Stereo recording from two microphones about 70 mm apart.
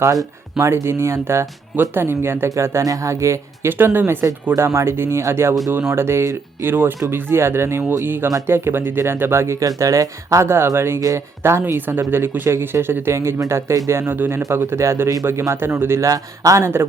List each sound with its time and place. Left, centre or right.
0.6 s speech: right
2.8 s speech: right
3.7 s speech: right
4.5 s speech: right
14.1 s speech: right
16.0 s speech: right